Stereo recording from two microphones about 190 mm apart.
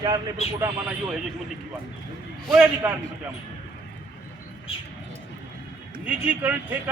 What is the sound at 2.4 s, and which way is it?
Speech, centre (ahead or behind).